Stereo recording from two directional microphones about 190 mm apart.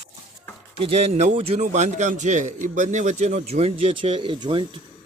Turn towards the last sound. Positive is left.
turn(degrees=-25)  # may be behind; listen again after turning